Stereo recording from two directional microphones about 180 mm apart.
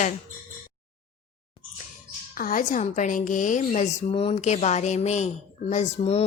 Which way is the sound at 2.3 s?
50° left (ahead or behind).